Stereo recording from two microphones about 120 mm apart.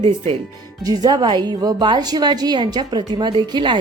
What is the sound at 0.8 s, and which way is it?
A woman's voice, 35° right (ahead or behind).